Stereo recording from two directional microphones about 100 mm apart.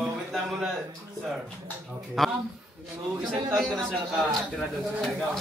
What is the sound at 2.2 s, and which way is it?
Speech, centre (ahead or behind).